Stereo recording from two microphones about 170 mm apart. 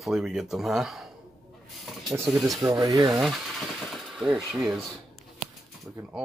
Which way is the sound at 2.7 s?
20° right (ahead or behind).